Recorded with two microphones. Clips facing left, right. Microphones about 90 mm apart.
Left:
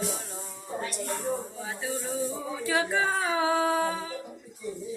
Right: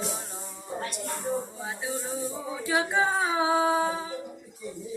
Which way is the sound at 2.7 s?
20° right (ahead or behind).